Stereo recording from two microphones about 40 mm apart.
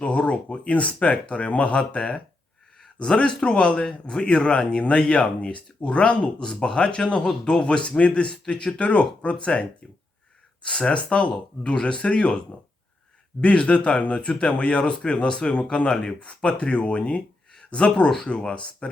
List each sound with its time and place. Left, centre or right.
0.0 s speech: left
6.4 s speech: centre
13.7 s speech: left
17.5 s a sound: left
18.3 s speech: left